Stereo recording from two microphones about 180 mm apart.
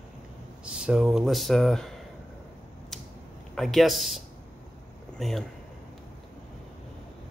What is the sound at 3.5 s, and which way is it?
Speech, centre (ahead or behind).